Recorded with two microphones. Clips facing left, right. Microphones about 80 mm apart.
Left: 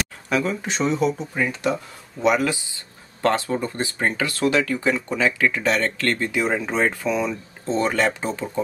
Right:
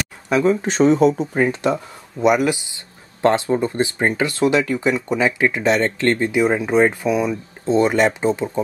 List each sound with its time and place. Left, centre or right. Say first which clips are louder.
0.3 s speech: right 7 dB; right
0.6 s speech: right 8 dB; right
1.7 s speech: right 4 dB; centre